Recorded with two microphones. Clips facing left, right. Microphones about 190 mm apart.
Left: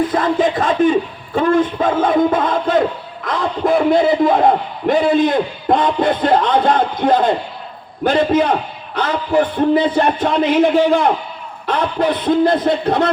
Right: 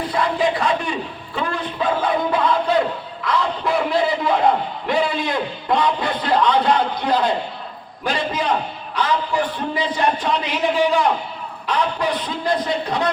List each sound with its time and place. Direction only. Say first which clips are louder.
0.1 s a man's voice: left 4 dB; 45° left (ahead or behind)